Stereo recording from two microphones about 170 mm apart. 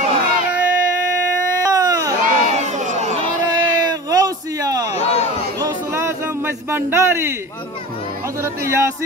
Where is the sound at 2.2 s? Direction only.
45° right (ahead or behind).